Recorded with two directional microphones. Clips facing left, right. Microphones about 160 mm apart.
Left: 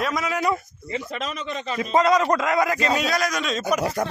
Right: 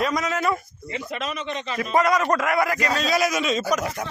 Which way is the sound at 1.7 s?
20° left (ahead or behind).